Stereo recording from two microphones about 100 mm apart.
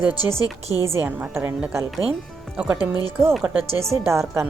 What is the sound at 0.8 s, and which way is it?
A woman's voice, 20° right (ahead or behind).